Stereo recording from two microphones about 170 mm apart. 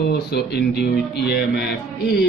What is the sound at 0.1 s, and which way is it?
Speech, 70° left (ahead or behind).